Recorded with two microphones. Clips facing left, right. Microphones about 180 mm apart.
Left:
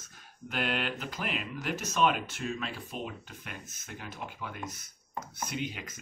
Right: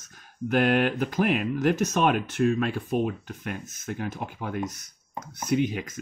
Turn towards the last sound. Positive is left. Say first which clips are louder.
# right 12 dB
turn(degrees=-50)  # may be behind; listen again after turning